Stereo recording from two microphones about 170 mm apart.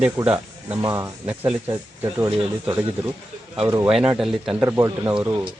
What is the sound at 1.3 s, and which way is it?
Speech, 10° right (ahead or behind).